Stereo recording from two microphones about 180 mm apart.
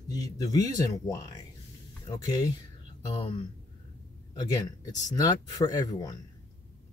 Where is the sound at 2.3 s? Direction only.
20° left (ahead or behind).